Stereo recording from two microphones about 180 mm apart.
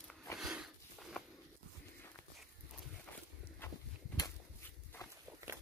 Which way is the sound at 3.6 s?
10° left (ahead or behind).